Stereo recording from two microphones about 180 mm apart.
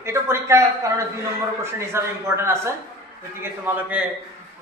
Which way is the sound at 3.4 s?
10° right (ahead or behind).